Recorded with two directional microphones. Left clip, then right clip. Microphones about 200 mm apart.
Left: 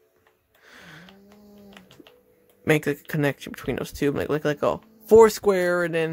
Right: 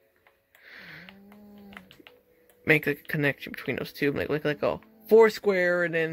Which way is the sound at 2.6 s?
20° left (ahead or behind).